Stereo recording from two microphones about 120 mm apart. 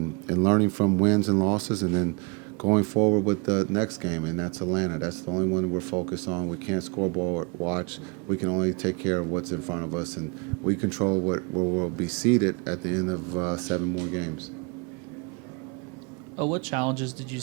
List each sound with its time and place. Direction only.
0.3 s speech: 25° right (ahead or behind)
12.0 s speech: 15° right (ahead or behind)
16.4 s speech: 20° right (ahead or behind)